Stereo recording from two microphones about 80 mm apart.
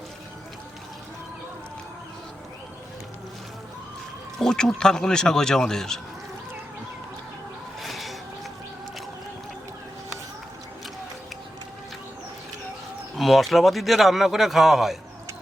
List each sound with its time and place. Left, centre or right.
4.4 s a man's voice: centre
7.8 s a sound: centre
13.1 s a man's voice: centre